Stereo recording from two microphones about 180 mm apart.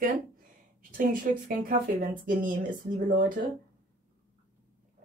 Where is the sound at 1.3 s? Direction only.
50° right (ahead or behind).